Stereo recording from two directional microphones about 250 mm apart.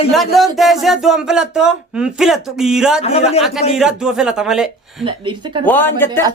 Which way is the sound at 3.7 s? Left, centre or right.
Centre.